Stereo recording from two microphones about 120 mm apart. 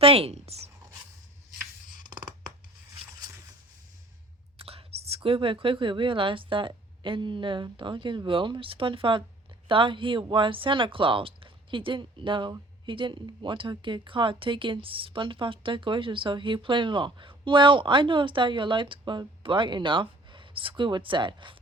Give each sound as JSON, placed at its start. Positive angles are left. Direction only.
{"t": 0.0, "sound": "speech", "side_deg": -55}
{"t": 2.0, "sound": "a sound", "side_deg": -35}
{"t": 4.5, "sound": "speech", "side_deg": -55}